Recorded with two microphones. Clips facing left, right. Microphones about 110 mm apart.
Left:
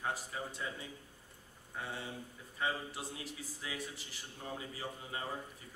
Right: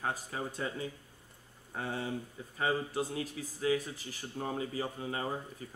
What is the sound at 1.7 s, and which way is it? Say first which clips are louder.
Speech: right 7 dB; 45° right (ahead or behind).